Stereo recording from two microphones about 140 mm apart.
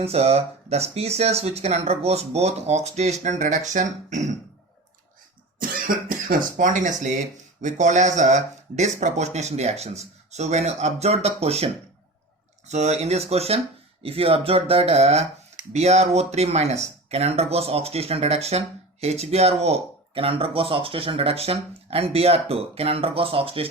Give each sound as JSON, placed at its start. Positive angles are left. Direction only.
{"t": 0.0, "sound": "speech", "side_deg": -45}
{"t": 6.1, "sound": "speech", "side_deg": -70}